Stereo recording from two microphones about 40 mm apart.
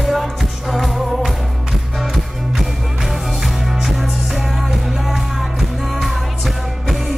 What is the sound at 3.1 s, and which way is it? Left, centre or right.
Music, centre.